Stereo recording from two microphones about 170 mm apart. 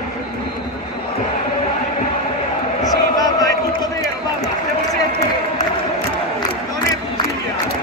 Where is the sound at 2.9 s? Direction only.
20° left (ahead or behind).